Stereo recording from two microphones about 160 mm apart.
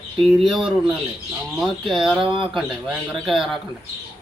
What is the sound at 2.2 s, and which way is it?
Speech, 35° right (ahead or behind).